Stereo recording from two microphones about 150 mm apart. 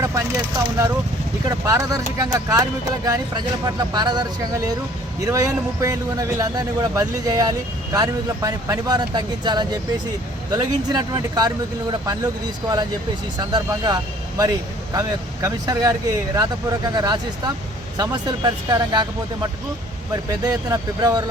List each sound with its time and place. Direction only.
0.0 s speech: 20° right (ahead or behind)
13.4 s speech: 25° right (ahead or behind)